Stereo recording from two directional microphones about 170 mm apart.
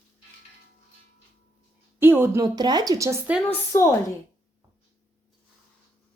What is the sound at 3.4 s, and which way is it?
Speech, 15° left (ahead or behind).